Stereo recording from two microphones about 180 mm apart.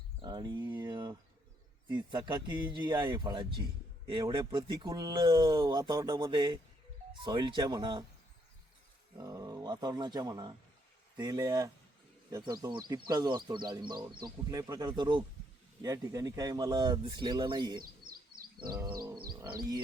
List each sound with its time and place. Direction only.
0.2 s a sound: 25° right (ahead or behind)
1.9 s speech: 25° right (ahead or behind)
9.1 s speech: 20° right (ahead or behind)